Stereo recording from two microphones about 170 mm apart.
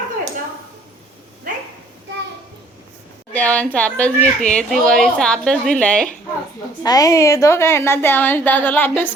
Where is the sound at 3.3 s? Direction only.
10° left (ahead or behind).